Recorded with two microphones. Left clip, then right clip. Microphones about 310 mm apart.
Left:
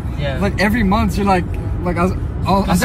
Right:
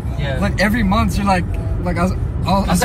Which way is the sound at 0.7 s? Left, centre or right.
Centre.